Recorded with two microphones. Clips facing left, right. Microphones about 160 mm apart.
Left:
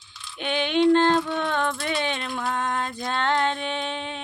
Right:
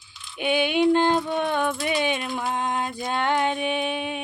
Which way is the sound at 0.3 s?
10° right (ahead or behind).